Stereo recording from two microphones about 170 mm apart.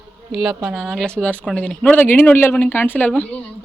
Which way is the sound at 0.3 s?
5° right (ahead or behind).